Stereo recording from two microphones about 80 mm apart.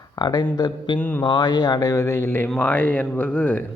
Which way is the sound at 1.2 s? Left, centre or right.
Left.